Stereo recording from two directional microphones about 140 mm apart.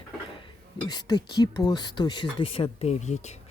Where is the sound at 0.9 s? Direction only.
30° left (ahead or behind); by 3.3 s 50° left (ahead or behind).